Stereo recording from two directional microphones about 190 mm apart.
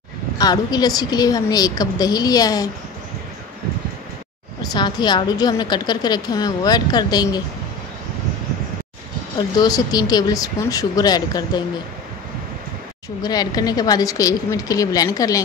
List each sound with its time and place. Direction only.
0.4 s a woman's voice: 20° left (ahead or behind)
4.7 s a woman's voice: 25° left (ahead or behind)
9.6 s a woman's voice: 20° left (ahead or behind)
13.2 s a woman's voice: 20° left (ahead or behind)